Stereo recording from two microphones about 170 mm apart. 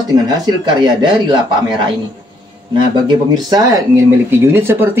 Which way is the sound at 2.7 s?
25° right (ahead or behind).